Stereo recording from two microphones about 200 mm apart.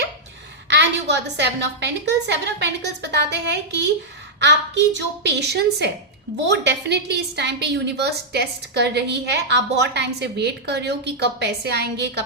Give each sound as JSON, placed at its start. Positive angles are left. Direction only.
{"t": 0.7, "sound": "a woman's voice", "side_deg": -60}